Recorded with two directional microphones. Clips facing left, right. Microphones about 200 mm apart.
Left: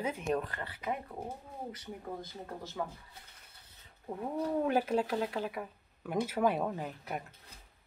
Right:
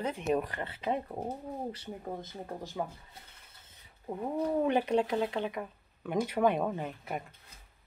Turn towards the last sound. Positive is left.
turn(degrees=0)  # may be behind; listen again after turning